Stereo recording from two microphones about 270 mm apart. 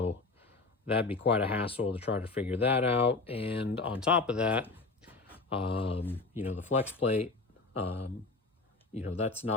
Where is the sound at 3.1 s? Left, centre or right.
Left.